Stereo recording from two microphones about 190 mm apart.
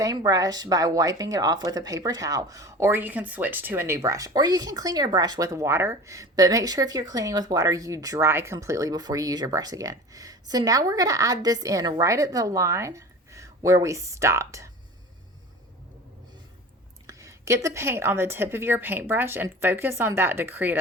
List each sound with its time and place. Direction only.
0.0 s speech: 20° right (ahead or behind)
17.1 s speech: 15° right (ahead or behind)